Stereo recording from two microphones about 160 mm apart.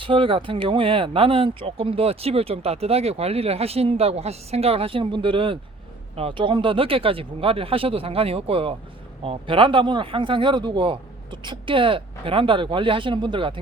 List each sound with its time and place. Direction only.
0.0 s speech: 35° right (ahead or behind)